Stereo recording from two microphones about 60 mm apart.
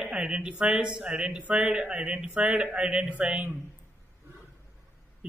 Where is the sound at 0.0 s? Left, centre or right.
Centre.